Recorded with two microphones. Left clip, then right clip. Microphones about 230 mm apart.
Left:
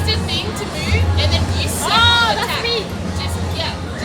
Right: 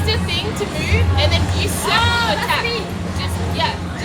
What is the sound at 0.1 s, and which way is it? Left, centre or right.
Music, right.